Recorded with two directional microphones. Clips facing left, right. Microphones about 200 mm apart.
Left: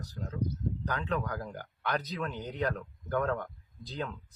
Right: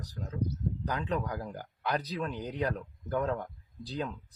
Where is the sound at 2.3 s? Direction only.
10° right (ahead or behind).